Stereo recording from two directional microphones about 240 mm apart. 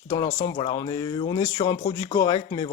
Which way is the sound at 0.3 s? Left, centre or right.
Left.